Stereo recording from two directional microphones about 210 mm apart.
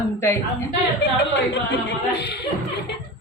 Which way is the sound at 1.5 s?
55° left (ahead or behind).